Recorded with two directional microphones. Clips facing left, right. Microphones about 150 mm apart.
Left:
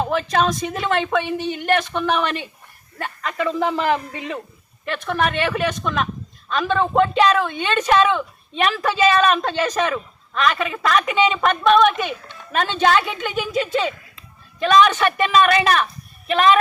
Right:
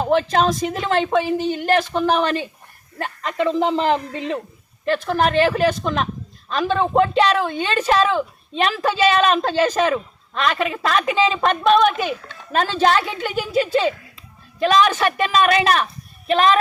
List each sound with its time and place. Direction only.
0.0 s speech: 30° right (ahead or behind)
3.0 s speech: 25° right (ahead or behind)